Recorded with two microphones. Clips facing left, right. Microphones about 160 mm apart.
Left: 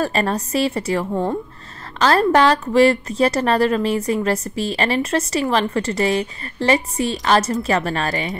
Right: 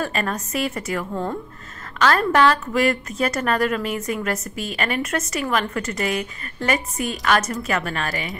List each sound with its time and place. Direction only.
0.0 s speech: 35° left (ahead or behind)